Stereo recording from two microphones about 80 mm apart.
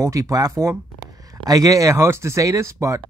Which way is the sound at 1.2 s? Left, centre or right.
Right.